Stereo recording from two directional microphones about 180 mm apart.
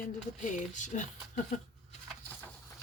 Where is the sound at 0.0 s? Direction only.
45° left (ahead or behind).